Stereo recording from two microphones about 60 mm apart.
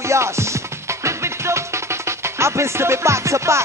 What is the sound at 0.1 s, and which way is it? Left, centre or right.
Music, right.